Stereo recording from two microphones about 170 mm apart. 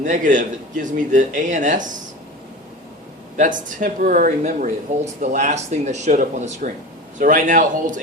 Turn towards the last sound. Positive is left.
turn(degrees=-50)  # may be behind; listen again after turning